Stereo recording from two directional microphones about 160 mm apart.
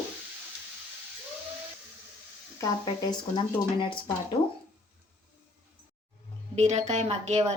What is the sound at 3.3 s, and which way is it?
Speech, 30° left (ahead or behind).